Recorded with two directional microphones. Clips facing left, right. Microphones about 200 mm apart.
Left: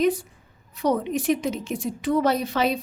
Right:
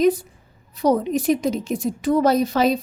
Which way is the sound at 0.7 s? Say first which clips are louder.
Right 4 dB; 35° right (ahead or behind).